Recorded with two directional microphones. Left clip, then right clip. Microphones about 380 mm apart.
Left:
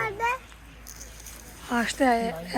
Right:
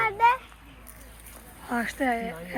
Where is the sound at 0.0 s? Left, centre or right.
Centre.